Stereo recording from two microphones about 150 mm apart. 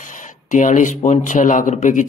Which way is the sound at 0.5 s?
55° left (ahead or behind).